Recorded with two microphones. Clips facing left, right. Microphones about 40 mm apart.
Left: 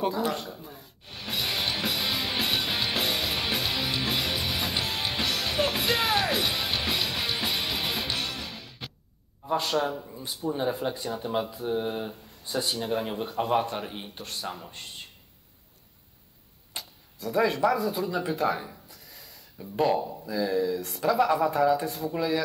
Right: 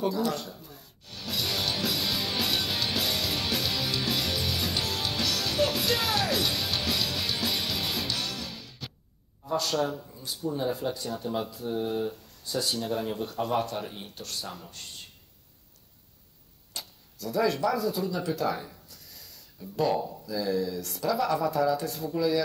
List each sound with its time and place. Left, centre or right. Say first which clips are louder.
0.0 s music: left 1 dB; left
8.5 s music: left 1 dB; centre
9.5 s speech: left 1 dB; left
16.7 s speech: left 1 dB; left
20.2 s speech: left 3 dB; left